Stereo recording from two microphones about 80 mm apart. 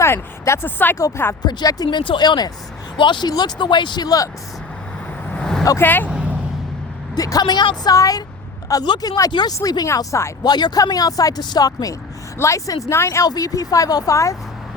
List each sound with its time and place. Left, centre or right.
0.0 s speech: left
0.9 s speech: left
1.5 s speech: left
3.0 s speech: left
5.3 s vehicle: centre
5.8 s speech: left
7.2 s a woman's voice: left
7.9 s speech: left
9.3 s a woman's voice: left
9.6 s speech: left
10.4 s speech: left
13.2 s speech: left